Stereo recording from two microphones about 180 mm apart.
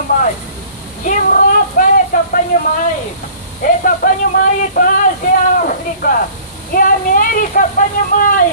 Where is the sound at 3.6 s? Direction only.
50° left (ahead or behind).